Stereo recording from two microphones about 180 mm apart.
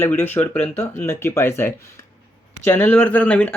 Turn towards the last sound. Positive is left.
turn(degrees=10)  # may be behind; listen again after turning